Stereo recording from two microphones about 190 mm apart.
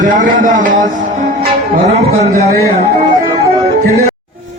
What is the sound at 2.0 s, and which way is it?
Speech, 35° right (ahead or behind).